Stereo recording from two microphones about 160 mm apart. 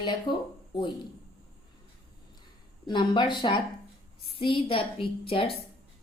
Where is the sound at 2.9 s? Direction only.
30° left (ahead or behind).